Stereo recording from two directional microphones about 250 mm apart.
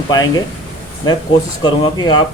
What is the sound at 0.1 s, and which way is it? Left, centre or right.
A man's voice, centre.